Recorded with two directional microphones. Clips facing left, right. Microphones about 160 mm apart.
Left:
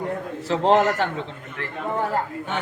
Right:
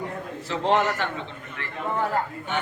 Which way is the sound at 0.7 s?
45° left (ahead or behind).